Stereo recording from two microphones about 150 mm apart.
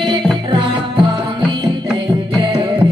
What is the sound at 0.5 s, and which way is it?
Music, 30° right (ahead or behind).